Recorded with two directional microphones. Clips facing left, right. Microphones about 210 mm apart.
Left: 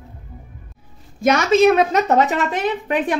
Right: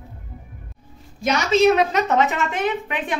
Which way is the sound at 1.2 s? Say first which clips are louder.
Left 3 dB; 50° left (ahead or behind).